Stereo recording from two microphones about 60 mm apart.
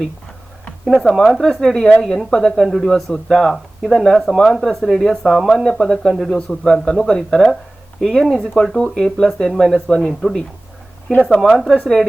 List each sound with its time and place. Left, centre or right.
1.0 s speech: centre